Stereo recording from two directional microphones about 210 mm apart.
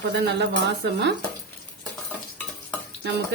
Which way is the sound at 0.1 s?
55° right (ahead or behind).